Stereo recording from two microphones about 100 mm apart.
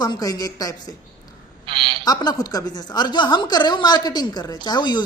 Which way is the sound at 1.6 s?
60° right (ahead or behind).